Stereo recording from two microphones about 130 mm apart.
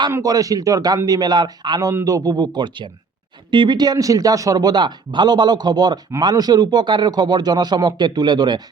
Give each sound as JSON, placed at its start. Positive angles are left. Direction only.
{"t": 0.1, "sound": "a man's voice", "side_deg": -25}